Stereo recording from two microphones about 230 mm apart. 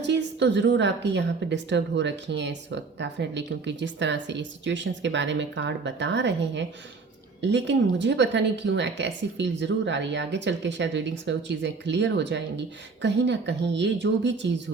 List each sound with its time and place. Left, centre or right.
0.0 s speech: right